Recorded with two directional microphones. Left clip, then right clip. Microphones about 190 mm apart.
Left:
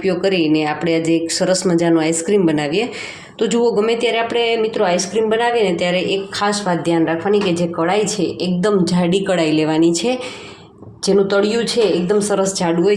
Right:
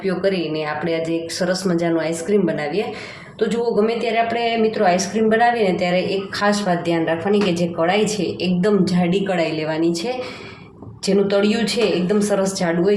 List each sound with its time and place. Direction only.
0.0 s speech: 40° left (ahead or behind)
11.0 s speech: 25° left (ahead or behind)